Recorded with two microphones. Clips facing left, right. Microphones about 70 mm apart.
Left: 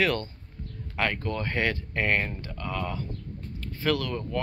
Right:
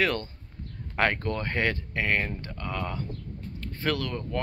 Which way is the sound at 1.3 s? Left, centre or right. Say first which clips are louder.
Even; right.